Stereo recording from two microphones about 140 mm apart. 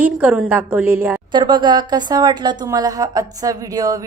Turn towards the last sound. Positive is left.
turn(degrees=-25)  # may be behind; listen again after turning